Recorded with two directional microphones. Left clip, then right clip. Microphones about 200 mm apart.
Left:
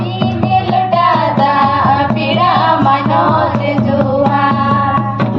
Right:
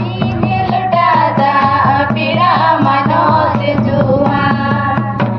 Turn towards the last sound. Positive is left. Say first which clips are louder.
# left 1 dB
turn(degrees=-40)  # may be behind; listen again after turning